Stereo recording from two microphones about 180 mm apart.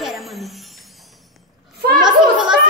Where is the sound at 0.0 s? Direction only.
Centre (ahead or behind).